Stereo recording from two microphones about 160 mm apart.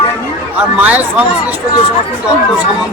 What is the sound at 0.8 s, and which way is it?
Speech, 10° right (ahead or behind).